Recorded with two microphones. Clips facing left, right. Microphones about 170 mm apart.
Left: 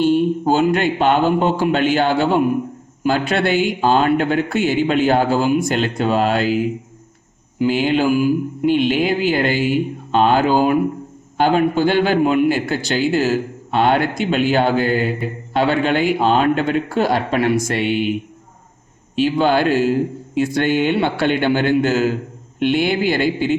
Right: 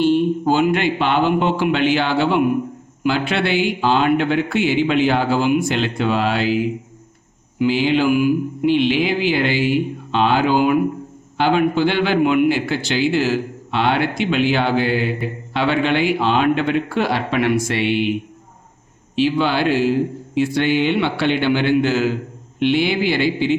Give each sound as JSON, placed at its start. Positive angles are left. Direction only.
{"t": 0.0, "sound": "a man's voice", "side_deg": 45}
{"t": 7.6, "sound": "a man's voice", "side_deg": 45}
{"t": 19.1, "sound": "a man's voice", "side_deg": 45}